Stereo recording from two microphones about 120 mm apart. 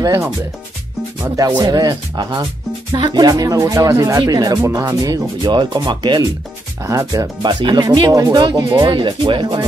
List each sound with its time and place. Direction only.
1.2 s speech: 30° right (ahead or behind)
2.9 s music: 40° right (ahead or behind)
4.6 s speech: 20° right (ahead or behind); by 6.2 s 35° right (ahead or behind)
6.8 s music: 25° right (ahead or behind)
7.4 s speech: 35° right (ahead or behind)